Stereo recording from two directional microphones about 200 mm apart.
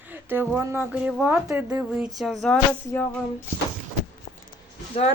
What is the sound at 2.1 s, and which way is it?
Music, centre (ahead or behind).